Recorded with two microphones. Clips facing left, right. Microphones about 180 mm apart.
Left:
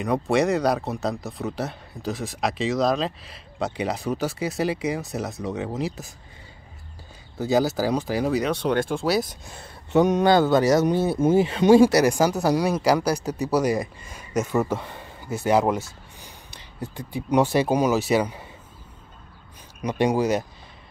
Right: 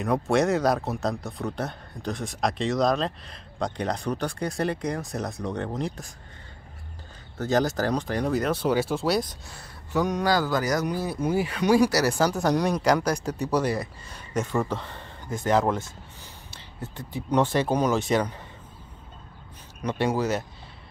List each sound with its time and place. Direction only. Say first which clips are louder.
0.0 s speech: left 1 dB; centre (ahead or behind)
7.3 s speech: left 2 dB; 10° left (ahead or behind)
9.5 s speech: left 7 dB; 25° left (ahead or behind); by 18.4 s 10° left (ahead or behind)
19.8 s speech: left 4 dB; 15° left (ahead or behind)